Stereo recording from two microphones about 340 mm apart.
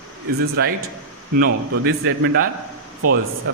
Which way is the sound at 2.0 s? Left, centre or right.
Right.